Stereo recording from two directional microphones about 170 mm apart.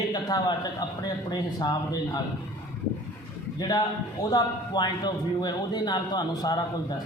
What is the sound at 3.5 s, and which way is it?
A man's voice, 25° left (ahead or behind).